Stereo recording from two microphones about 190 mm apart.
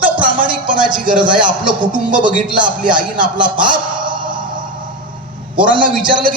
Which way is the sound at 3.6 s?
25° right (ahead or behind).